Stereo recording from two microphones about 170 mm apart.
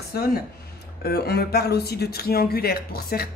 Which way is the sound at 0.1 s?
60° left (ahead or behind).